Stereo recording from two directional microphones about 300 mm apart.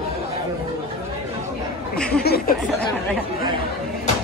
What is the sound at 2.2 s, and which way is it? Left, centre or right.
Speech, left.